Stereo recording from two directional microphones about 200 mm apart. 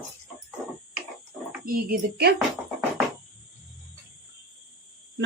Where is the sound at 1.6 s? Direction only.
50° right (ahead or behind).